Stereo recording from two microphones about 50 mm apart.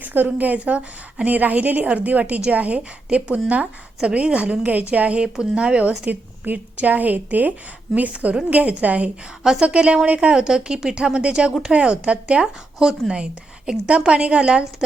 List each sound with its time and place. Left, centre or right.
0.0 s a woman's voice: right
6.1 s a woman's voice: right
12.8 s speech: centre
13.7 s a woman's voice: right